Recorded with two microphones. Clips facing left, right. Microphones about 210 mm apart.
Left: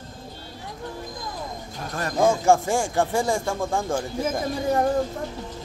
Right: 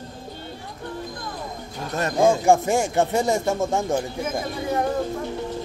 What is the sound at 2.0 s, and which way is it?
Speech, 20° right (ahead or behind).